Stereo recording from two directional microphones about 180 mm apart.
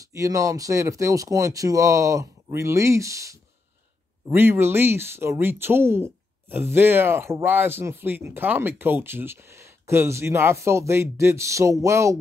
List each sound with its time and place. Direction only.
0.0 s speech: 20° right (ahead or behind)